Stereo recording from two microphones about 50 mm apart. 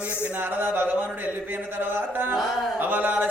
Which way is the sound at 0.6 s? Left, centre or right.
Right.